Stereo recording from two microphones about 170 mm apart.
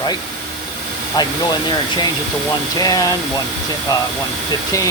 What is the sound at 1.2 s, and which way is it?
Speech, 25° left (ahead or behind).